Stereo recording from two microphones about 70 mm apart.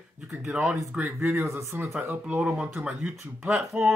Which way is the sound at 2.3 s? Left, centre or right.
Centre.